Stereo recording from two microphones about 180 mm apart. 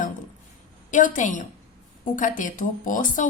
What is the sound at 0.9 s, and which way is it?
A woman's voice, 45° left (ahead or behind).